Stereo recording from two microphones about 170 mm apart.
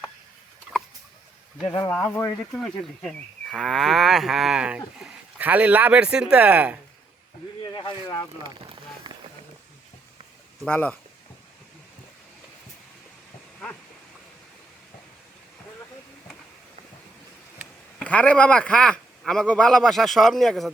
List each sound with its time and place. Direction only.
2.0 s a man's voice: 5° left (ahead or behind)
7.6 s speech: 25° left (ahead or behind)
8.4 s rain on surface: 25° right (ahead or behind)
10.6 s speech: 10° left (ahead or behind)
18.0 s a man's voice: 10° left (ahead or behind)